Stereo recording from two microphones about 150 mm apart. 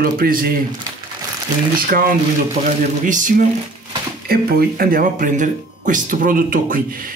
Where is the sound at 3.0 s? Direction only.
60° right (ahead or behind).